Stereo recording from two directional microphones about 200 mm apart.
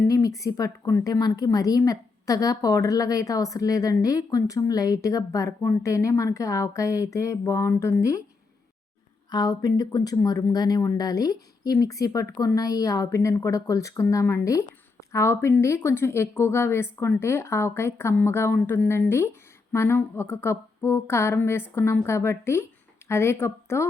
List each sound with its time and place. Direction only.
0.0 s a woman's voice: 15° left (ahead or behind)
9.3 s a woman's voice: 20° left (ahead or behind)